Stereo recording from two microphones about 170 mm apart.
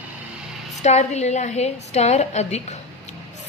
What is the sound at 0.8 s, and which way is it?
A woman's voice, 40° left (ahead or behind).